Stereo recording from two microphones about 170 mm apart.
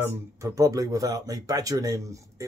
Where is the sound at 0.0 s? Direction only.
20° right (ahead or behind).